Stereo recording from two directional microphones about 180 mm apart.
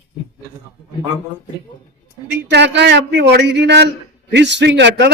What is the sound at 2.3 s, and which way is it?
A man's voice, 70° right (ahead or behind).